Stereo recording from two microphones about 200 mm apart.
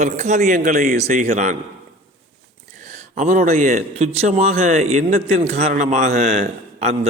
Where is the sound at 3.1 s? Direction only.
40° right (ahead or behind).